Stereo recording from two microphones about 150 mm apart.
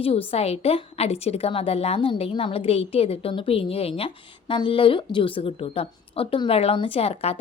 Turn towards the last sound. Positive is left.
turn(degrees=40)  # may be behind; listen again after turning